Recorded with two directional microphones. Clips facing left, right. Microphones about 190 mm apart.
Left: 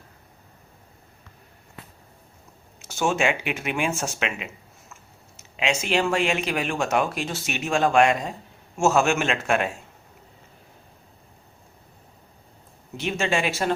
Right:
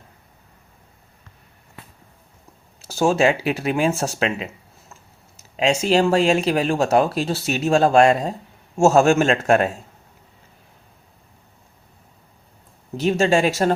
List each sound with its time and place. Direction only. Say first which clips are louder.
2.8 s speech: right 6 dB; 35° right (ahead or behind)
5.4 s a sound: right 6 dB; 40° right (ahead or behind)
5.8 s speech: right 6 dB; 40° right (ahead or behind)
13.0 s speech: right 7 dB; 40° right (ahead or behind)